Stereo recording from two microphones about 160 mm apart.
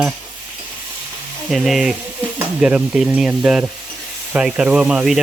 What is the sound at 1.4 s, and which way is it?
Speech, centre (ahead or behind).